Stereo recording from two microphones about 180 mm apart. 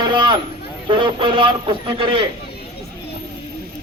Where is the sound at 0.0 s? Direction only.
25° right (ahead or behind).